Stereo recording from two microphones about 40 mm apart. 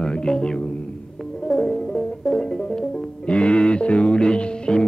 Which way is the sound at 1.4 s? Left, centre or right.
Centre.